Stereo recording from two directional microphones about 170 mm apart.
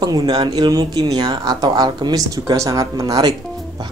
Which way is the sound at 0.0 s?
25° right (ahead or behind).